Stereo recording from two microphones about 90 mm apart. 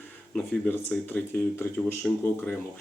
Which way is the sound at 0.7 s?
20° left (ahead or behind).